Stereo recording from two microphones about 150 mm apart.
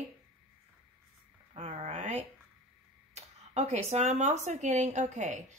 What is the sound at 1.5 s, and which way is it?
A woman's voice, 45° right (ahead or behind).